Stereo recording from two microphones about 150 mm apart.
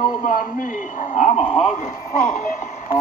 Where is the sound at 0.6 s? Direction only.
65° left (ahead or behind).